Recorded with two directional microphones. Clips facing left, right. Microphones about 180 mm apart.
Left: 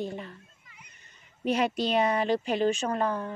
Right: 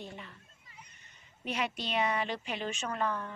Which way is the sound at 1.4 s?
40° left (ahead or behind).